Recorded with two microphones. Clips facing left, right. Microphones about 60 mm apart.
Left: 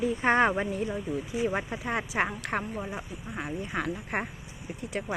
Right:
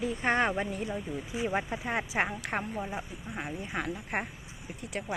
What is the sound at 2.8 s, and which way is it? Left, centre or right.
Speech, centre.